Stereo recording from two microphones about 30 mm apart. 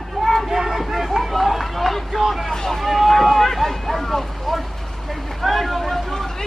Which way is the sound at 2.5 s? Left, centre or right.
Centre.